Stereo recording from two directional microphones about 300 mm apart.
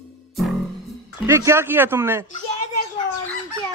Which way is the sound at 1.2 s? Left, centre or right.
Centre.